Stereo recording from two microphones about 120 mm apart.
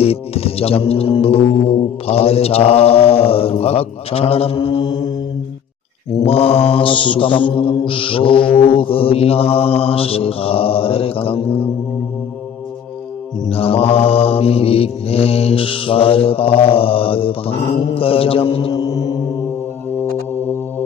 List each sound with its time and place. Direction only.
0.0 s mantra: 55° left (ahead or behind); by 5.1 s 35° left (ahead or behind)
6.2 s mantra: 55° left (ahead or behind)
13.5 s mantra: 50° left (ahead or behind)
18.8 s mantra: 30° left (ahead or behind)